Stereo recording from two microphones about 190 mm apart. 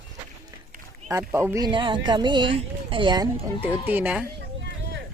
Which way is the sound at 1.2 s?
10° right (ahead or behind).